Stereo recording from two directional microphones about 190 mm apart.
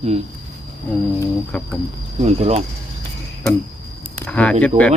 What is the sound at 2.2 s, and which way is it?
Speech, 35° right (ahead or behind).